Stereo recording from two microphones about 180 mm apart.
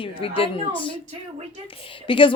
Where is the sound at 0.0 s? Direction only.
30° left (ahead or behind).